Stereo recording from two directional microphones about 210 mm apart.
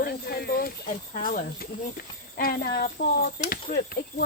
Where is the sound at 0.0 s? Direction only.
50° left (ahead or behind).